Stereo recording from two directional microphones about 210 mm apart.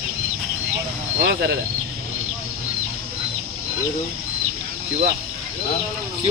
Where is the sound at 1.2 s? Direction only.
50° right (ahead or behind).